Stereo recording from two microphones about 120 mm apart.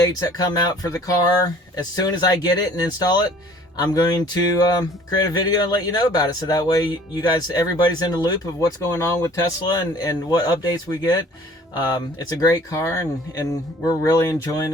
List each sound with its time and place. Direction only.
0.1 s speech: 30° left (ahead or behind)